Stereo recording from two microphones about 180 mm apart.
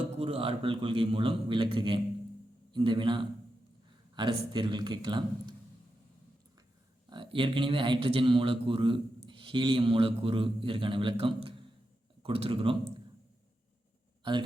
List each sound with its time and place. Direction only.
0.2 s a man's voice: 30° right (ahead or behind)
7.1 s a man's voice: 25° right (ahead or behind)
14.2 s a man's voice: 25° right (ahead or behind)